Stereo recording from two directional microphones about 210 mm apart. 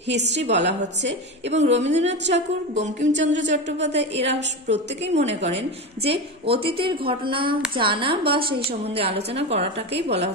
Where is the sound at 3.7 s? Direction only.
55° right (ahead or behind).